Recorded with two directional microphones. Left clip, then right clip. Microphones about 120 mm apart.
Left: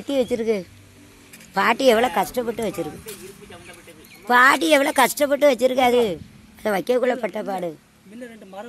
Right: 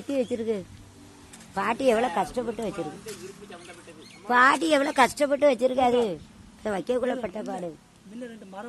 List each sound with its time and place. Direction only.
0.1 s speech: 35° left (ahead or behind)
3.1 s speech: 90° left
4.3 s speech: 35° left (ahead or behind)
5.5 s speech: 25° left (ahead or behind)
6.6 s speech: 40° left (ahead or behind)